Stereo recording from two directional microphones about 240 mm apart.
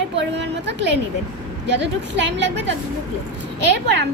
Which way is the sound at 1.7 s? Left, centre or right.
Right.